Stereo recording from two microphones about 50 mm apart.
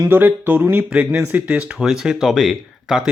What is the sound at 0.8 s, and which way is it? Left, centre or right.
Speech, right.